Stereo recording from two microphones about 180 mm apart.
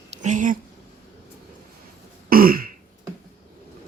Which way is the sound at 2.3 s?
55° right (ahead or behind).